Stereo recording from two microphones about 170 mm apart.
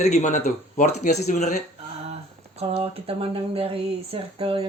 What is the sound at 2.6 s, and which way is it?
Speech, 35° right (ahead or behind).